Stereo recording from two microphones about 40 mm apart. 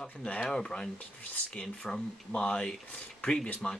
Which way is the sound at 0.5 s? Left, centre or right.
Left.